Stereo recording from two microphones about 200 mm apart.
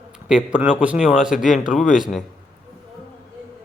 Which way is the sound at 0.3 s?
5° right (ahead or behind).